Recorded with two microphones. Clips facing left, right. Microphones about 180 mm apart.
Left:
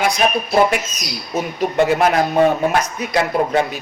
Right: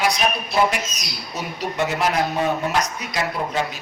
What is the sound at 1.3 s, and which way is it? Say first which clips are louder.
A man's voice: left 8 dB; 50° left (ahead or behind).